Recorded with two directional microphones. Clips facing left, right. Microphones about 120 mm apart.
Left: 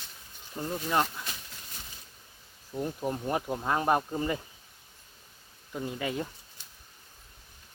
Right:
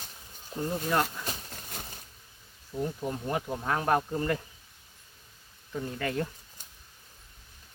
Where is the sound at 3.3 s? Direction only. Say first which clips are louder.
Even; 15° left (ahead or behind).